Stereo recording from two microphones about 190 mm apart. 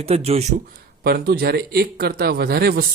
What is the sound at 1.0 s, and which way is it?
Speech, 55° right (ahead or behind).